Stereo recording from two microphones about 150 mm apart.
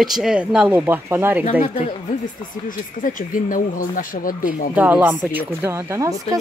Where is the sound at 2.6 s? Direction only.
65° left (ahead or behind).